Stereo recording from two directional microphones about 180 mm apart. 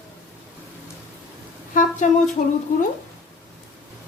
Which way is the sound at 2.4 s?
45° left (ahead or behind).